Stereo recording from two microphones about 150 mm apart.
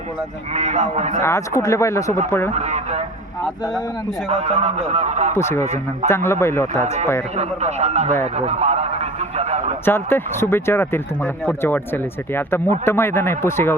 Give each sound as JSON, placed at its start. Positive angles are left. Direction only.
{"t": 0.5, "sound": "a man's voice", "side_deg": -50}
{"t": 1.2, "sound": "speech", "side_deg": 20}
{"t": 2.5, "sound": "a man's voice", "side_deg": -50}
{"t": 4.3, "sound": "a man's voice", "side_deg": -45}
{"t": 5.4, "sound": "speech", "side_deg": 15}
{"t": 7.3, "sound": "a man's voice", "side_deg": -50}
{"t": 8.4, "sound": "a sound", "side_deg": -45}
{"t": 9.8, "sound": "speech", "side_deg": 15}